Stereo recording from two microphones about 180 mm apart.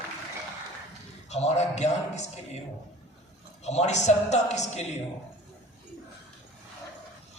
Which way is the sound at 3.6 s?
40° left (ahead or behind).